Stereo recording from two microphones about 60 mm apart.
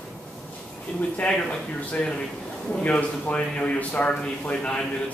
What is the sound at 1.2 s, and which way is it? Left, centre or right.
A man's voice, left.